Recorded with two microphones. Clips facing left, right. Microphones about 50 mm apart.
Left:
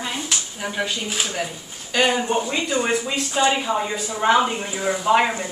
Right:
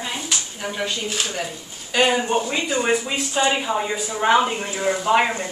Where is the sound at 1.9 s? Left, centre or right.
Centre.